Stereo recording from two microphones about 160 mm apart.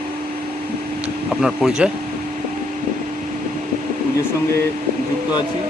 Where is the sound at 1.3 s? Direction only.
5° right (ahead or behind).